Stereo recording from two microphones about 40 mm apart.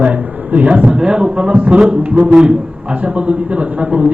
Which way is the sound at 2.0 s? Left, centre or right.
Right.